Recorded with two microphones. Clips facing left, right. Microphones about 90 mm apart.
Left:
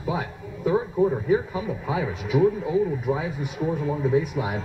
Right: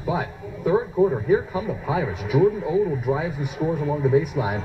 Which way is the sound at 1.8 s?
20° right (ahead or behind).